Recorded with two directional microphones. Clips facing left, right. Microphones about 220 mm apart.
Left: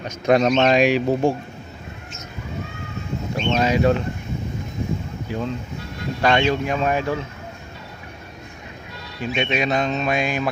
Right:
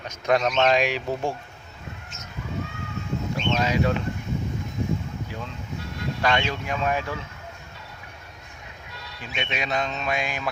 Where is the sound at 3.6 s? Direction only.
30° left (ahead or behind).